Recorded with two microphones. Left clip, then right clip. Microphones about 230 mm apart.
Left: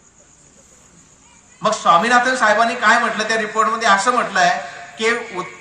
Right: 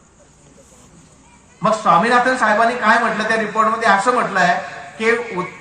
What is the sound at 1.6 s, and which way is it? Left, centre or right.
A man's voice, left.